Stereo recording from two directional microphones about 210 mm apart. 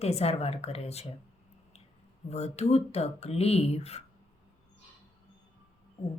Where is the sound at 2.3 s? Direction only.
30° left (ahead or behind).